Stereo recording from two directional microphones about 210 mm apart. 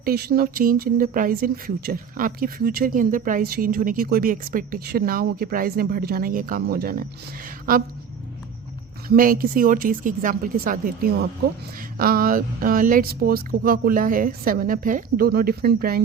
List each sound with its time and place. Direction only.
0.0 s speech: 45° right (ahead or behind)
9.0 s speech: 40° right (ahead or behind)